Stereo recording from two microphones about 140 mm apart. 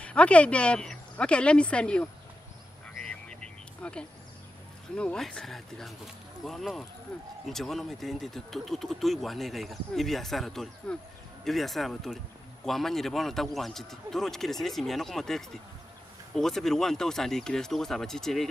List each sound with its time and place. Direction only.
0.0 s speech: 10° left (ahead or behind)
3.0 s vehicle: 5° left (ahead or behind)
3.8 s speech: 10° left (ahead or behind)